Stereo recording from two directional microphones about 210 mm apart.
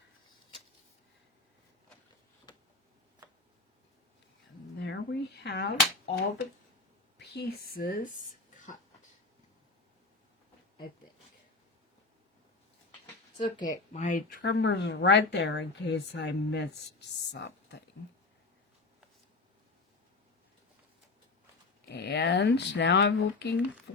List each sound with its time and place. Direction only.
2.5 s a sound: 20° left (ahead or behind)
4.8 s a sound: 55° left (ahead or behind)
7.2 s speech: 50° left (ahead or behind)
13.4 s speech: 20° left (ahead or behind)
13.9 s speech: 35° left (ahead or behind); by 17.7 s 55° left (ahead or behind)
21.8 s speech: 50° left (ahead or behind)